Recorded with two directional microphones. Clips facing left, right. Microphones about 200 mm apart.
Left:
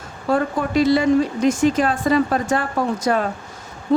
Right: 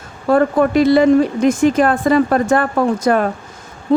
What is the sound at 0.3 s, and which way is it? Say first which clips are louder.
Speech: right 7 dB; 55° right (ahead or behind).